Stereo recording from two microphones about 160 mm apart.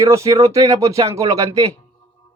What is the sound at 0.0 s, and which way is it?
Speech, 20° right (ahead or behind).